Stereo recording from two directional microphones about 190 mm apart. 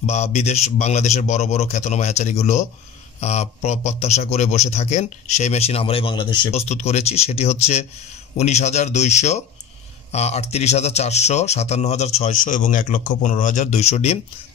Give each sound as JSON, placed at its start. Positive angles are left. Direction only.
{"t": 0.0, "sound": "a man's voice", "side_deg": 35}